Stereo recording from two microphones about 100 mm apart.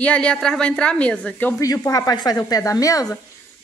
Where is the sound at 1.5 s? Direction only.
30° left (ahead or behind).